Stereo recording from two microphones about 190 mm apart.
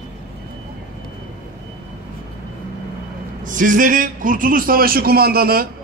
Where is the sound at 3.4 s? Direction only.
45° right (ahead or behind).